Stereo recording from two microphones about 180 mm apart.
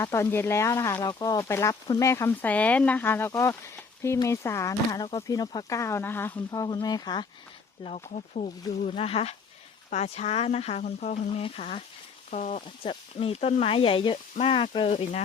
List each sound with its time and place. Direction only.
0.0 s speech: 15° left (ahead or behind)
7.9 s speech: 35° left (ahead or behind)
12.6 s speech: 30° left (ahead or behind)